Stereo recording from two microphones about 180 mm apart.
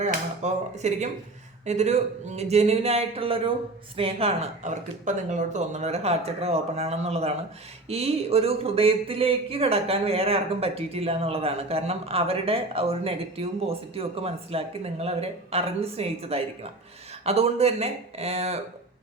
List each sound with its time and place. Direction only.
0.0 s speech: 40° right (ahead or behind)